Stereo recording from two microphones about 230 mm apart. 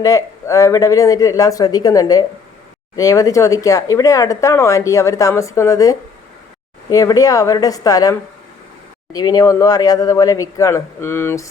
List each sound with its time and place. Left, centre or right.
0.0 s speech: centre
9.1 s speech: centre